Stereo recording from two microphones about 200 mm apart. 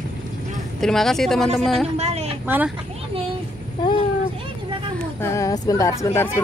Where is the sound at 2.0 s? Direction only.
35° right (ahead or behind).